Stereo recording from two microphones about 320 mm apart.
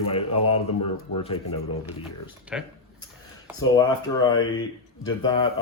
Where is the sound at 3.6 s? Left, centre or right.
Centre.